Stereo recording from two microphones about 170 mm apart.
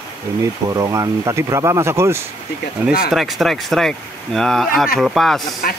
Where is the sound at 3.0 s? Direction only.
Centre (ahead or behind).